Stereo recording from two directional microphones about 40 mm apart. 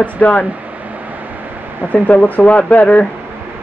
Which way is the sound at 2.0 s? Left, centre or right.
Left.